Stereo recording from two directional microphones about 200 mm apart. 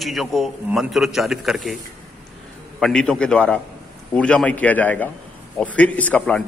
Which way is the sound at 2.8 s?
5° left (ahead or behind).